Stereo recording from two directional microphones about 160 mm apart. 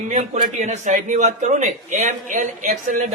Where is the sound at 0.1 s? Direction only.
50° right (ahead or behind).